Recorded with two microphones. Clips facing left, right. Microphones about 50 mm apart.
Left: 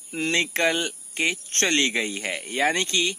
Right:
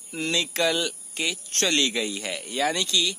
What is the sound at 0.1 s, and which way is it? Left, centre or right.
A man's voice, left.